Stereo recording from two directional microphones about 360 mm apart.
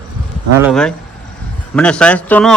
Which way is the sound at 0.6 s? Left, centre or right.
Centre.